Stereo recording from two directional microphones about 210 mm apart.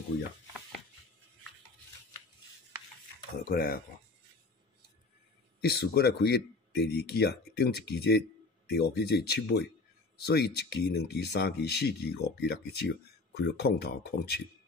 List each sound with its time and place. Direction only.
3.4 s speech: 45° left (ahead or behind)
5.6 s speech: 50° left (ahead or behind)